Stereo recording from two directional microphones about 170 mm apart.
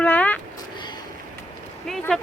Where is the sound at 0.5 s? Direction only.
25° left (ahead or behind).